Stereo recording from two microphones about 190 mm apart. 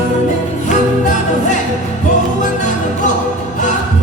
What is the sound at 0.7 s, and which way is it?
Music, 40° left (ahead or behind).